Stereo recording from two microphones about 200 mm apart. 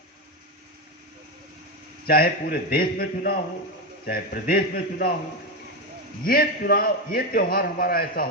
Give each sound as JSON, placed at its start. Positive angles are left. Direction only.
{"t": 2.0, "sound": "a man's voice", "side_deg": 50}
{"t": 6.2, "sound": "a man's voice", "side_deg": 45}